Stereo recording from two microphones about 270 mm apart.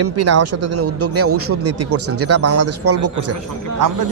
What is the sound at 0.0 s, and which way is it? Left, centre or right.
A man's voice, right.